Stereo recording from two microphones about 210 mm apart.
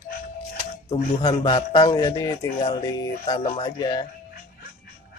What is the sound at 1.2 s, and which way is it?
Speech, 20° left (ahead or behind).